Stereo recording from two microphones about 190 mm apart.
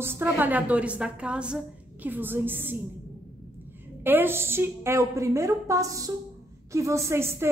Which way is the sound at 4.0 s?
10° right (ahead or behind).